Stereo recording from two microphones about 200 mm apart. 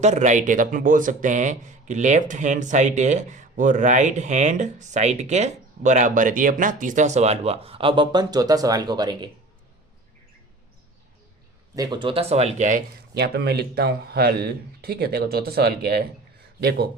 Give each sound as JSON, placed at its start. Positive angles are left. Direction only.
{"t": 0.0, "sound": "speech", "side_deg": -35}
{"t": 11.7, "sound": "speech", "side_deg": -20}
{"t": 13.1, "sound": "speech", "side_deg": -55}